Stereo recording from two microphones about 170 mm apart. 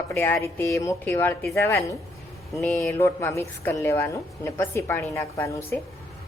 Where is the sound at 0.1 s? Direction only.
15° left (ahead or behind).